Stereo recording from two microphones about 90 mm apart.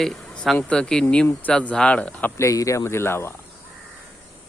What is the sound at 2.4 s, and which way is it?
Speech, 35° left (ahead or behind).